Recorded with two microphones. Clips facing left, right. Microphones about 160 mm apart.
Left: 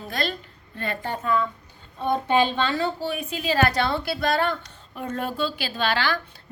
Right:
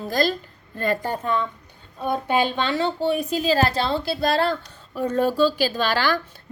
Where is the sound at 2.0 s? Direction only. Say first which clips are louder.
Left 1 dB; 10° right (ahead or behind).